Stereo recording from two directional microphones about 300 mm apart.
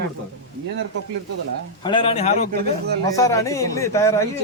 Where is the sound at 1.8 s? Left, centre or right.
Centre.